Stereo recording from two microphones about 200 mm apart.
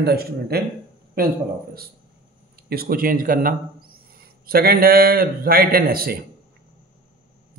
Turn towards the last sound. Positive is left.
turn(degrees=-50)  # may be behind; listen again after turning